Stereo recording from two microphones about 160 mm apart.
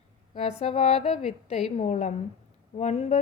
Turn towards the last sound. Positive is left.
turn(degrees=45)  # may be behind; listen again after turning